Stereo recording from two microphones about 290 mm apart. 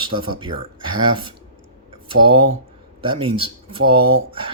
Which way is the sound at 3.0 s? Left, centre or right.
Centre.